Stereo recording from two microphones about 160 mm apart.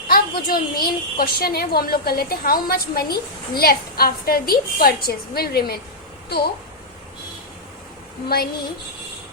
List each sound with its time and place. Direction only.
0.1 s a woman's voice: 70° left (ahead or behind); by 6.5 s 85° left